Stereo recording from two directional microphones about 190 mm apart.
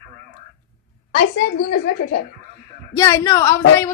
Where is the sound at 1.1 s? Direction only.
60° left (ahead or behind).